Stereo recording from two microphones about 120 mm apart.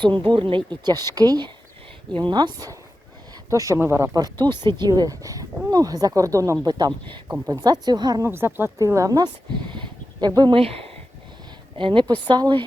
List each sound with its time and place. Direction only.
0.0 s speech: 40° right (ahead or behind); by 6.7 s 25° right (ahead or behind)
6.7 s speech: 35° right (ahead or behind)
8.2 s speech: 20° right (ahead or behind); by 10.6 s 35° right (ahead or behind)
10.6 s speech: 55° right (ahead or behind)
11.8 s a woman's voice: 40° right (ahead or behind)